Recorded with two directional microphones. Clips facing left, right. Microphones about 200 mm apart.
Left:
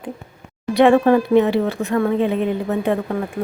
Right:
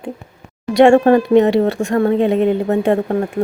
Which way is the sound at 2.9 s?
40° right (ahead or behind).